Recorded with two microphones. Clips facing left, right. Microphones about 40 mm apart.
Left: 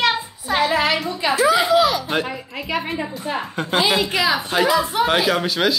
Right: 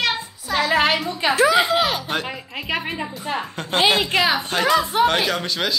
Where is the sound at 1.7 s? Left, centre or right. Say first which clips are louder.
Left 4 dB; right.